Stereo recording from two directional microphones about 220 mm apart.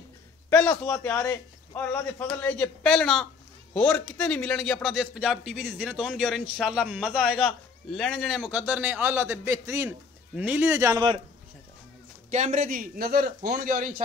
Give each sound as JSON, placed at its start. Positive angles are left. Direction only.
{"t": 0.5, "sound": "a man's voice", "side_deg": 5}
{"t": 12.3, "sound": "a man's voice", "side_deg": -35}